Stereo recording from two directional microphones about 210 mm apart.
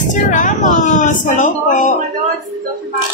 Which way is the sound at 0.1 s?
40° left (ahead or behind).